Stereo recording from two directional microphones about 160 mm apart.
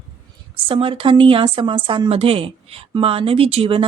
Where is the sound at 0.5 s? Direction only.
35° right (ahead or behind).